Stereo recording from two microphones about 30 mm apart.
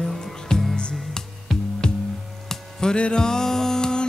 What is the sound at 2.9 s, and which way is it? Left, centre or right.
Music, left.